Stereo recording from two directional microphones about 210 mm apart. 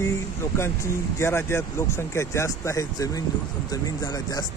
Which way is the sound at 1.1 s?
10° left (ahead or behind).